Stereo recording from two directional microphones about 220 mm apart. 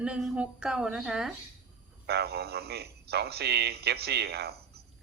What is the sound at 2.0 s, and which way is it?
A man's voice, 45° right (ahead or behind).